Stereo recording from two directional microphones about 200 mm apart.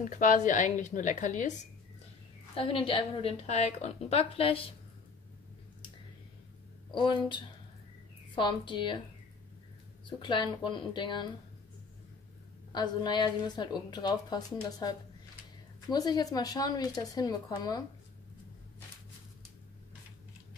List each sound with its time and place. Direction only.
0.0 s speech: 40° left (ahead or behind)
2.5 s a woman's voice: 25° left (ahead or behind)
7.0 s a woman's voice: 25° left (ahead or behind)
10.0 s a woman's voice: 25° left (ahead or behind)
12.7 s a woman's voice: 20° left (ahead or behind)